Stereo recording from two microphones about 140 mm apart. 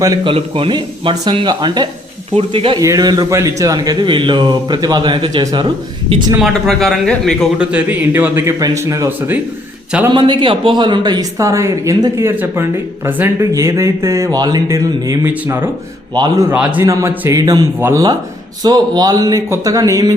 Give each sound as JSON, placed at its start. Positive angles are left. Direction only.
{"t": 0.3, "sound": "a man's voice", "side_deg": -40}
{"t": 2.3, "sound": "a man's voice", "side_deg": -40}
{"t": 2.8, "sound": "a man's voice", "side_deg": -25}
{"t": 6.4, "sound": "a man's voice", "side_deg": 0}
{"t": 7.6, "sound": "a man's voice", "side_deg": -10}
{"t": 10.1, "sound": "a man's voice", "side_deg": -35}
{"t": 16.1, "sound": "a man's voice", "side_deg": -30}
{"t": 16.5, "sound": "speech", "side_deg": -15}